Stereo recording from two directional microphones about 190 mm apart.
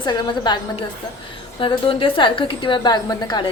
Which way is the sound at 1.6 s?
25° left (ahead or behind).